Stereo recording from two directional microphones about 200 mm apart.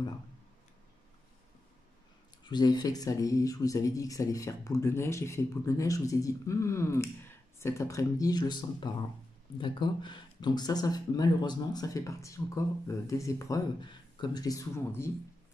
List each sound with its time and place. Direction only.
2.4 s speech: 20° left (ahead or behind)